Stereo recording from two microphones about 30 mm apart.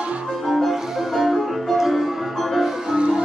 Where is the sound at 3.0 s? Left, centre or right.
Right.